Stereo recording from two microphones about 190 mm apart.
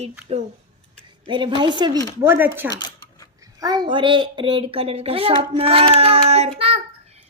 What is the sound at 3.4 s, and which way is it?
A woman's voice, 20° right (ahead or behind).